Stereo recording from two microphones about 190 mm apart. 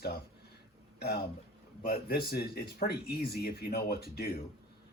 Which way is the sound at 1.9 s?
55° left (ahead or behind).